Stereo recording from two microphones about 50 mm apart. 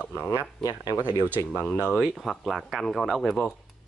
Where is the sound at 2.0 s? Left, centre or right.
Centre.